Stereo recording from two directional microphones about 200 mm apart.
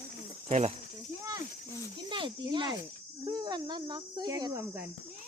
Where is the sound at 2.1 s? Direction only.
25° right (ahead or behind).